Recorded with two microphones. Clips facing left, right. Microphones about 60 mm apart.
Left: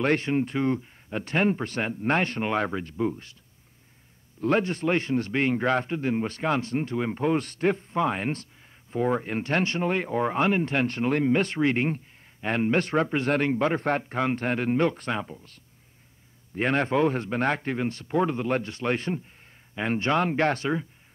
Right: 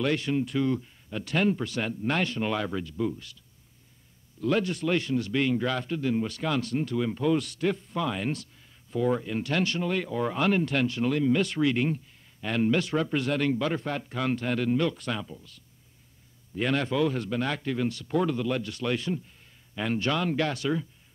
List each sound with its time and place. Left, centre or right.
0.0 s a man's voice: left
4.4 s a man's voice: left
10.9 s a man's voice: left
16.5 s a man's voice: left